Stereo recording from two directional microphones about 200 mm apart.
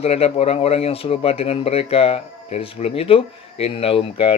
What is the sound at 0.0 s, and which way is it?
Speech, 30° left (ahead or behind).